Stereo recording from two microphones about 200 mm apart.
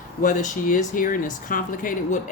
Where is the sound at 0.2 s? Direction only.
40° left (ahead or behind).